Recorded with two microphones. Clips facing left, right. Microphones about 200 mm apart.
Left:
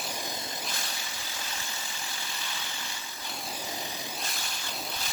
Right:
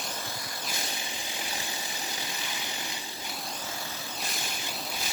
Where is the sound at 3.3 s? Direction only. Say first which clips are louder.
Left 1 dB; centre (ahead or behind).